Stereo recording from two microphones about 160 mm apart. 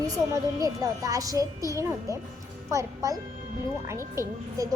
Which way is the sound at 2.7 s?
20° right (ahead or behind).